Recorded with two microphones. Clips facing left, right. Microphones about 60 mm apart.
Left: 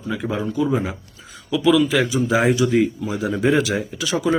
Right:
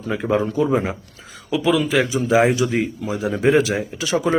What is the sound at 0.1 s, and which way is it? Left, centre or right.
Speech, right.